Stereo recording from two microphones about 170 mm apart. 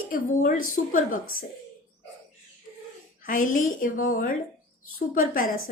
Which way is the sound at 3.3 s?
50° left (ahead or behind).